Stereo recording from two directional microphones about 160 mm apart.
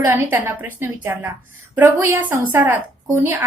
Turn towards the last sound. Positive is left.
turn(degrees=-15)  # may be behind; listen again after turning